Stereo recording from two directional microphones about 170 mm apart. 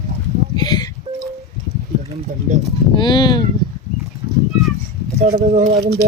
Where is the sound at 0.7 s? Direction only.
25° left (ahead or behind).